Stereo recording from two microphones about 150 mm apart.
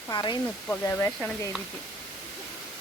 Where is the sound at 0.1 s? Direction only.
30° left (ahead or behind).